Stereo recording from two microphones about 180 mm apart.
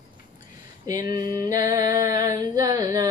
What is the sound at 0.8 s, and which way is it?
Speech, 20° right (ahead or behind).